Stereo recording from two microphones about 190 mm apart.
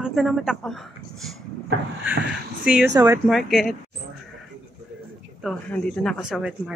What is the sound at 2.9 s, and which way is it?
Speech, 15° right (ahead or behind).